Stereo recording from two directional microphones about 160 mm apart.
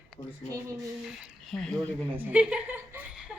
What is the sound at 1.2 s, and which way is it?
Speech, centre (ahead or behind).